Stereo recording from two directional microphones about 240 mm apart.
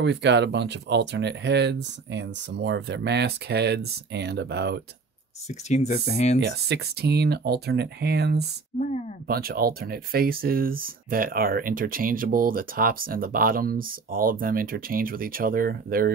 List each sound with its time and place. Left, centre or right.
0.0 s speech: right
5.5 s speech: left
6.4 s speech: right
8.7 s speech: left
9.3 s speech: right